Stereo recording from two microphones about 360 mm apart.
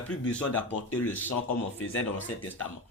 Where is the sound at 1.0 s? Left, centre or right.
Left.